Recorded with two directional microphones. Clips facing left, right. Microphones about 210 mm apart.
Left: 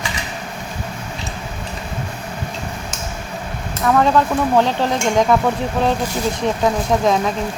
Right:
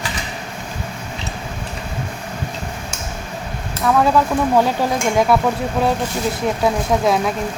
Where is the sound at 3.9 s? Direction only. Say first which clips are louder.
Even; 10° right (ahead or behind).